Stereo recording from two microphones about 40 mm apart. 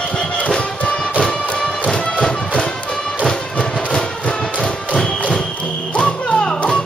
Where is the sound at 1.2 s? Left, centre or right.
Left.